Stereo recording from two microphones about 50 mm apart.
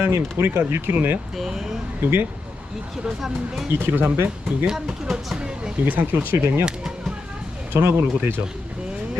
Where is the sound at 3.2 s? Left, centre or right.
Centre.